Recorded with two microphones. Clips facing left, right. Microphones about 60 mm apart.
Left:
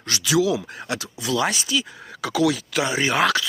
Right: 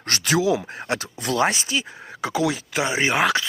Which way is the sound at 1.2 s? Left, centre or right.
Right.